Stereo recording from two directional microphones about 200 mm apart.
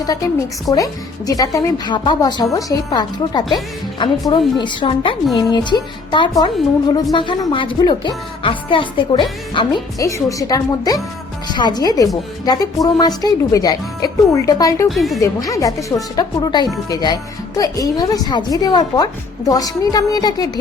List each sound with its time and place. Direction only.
0.0 s a woman's voice: 20° left (ahead or behind)
14.8 s a woman's voice: centre (ahead or behind)
15.2 s a woman's voice: 15° left (ahead or behind)